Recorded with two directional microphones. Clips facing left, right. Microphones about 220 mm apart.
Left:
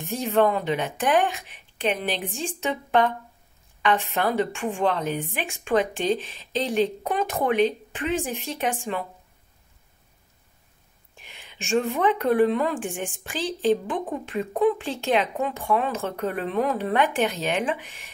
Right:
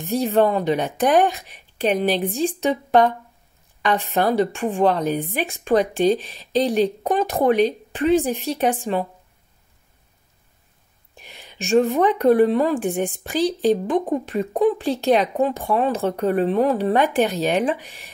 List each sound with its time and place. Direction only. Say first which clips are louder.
0.1 s speech: right 4 dB; 35° right (ahead or behind)
11.2 s speech: right 5 dB; 40° right (ahead or behind)